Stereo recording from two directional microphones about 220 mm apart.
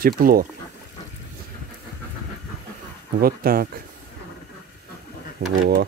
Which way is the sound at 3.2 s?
40° right (ahead or behind).